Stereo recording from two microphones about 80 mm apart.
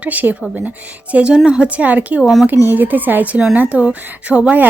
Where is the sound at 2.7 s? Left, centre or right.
Right.